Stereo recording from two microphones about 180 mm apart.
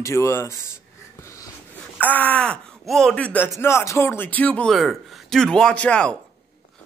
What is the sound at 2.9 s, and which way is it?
Speech, centre (ahead or behind).